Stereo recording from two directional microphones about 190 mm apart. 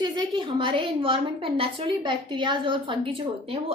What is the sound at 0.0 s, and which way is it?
A woman's voice, 25° right (ahead or behind).